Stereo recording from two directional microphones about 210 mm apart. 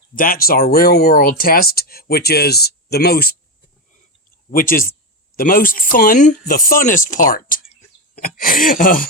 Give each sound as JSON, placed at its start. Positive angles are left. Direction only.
{"t": 0.2, "sound": "speech", "side_deg": 45}
{"t": 4.5, "sound": "speech", "side_deg": 40}